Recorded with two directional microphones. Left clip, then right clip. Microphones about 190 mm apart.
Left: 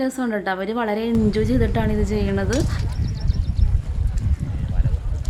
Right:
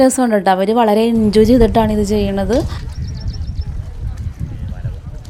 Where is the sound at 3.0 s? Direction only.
15° right (ahead or behind).